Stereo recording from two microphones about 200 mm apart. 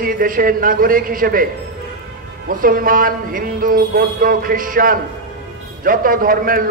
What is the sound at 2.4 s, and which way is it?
Speech, 45° right (ahead or behind).